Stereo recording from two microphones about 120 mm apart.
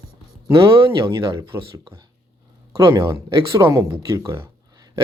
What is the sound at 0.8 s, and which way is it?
Speech, 40° right (ahead or behind).